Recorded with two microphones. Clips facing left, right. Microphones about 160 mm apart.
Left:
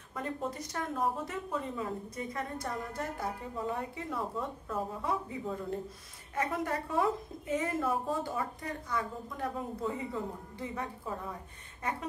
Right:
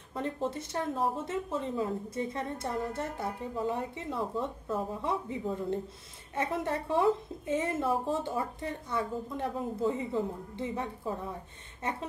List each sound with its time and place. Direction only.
0.1 s speech: 30° right (ahead or behind)